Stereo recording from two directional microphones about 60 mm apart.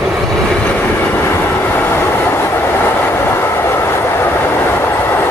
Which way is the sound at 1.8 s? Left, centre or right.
Left.